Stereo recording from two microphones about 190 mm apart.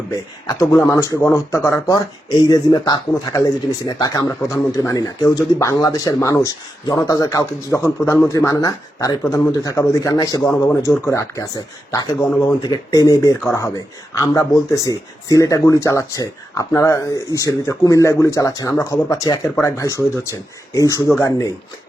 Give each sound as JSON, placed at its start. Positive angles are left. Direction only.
{"t": 0.1, "sound": "speech", "side_deg": 15}